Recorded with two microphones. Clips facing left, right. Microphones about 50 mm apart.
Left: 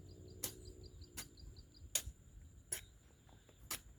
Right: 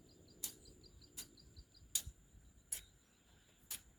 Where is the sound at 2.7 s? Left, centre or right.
Left.